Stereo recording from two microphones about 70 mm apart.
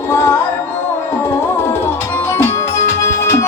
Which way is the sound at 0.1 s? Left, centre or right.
Left.